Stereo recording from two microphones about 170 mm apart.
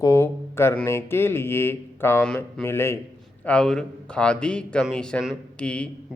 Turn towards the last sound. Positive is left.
turn(degrees=5)  # may be behind; listen again after turning